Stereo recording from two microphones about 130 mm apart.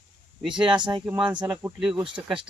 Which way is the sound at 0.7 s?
35° right (ahead or behind).